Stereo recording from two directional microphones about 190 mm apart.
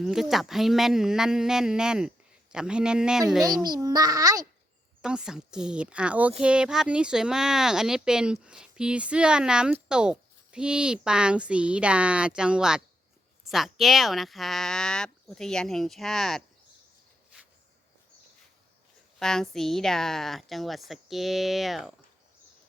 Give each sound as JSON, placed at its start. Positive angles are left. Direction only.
{"t": 0.0, "sound": "speech", "side_deg": 0}
{"t": 3.6, "sound": "a child's voice", "side_deg": -20}
{"t": 5.0, "sound": "speech", "side_deg": -5}
{"t": 19.2, "sound": "speech", "side_deg": 0}